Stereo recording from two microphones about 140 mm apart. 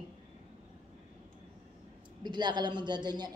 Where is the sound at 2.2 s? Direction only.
30° right (ahead or behind).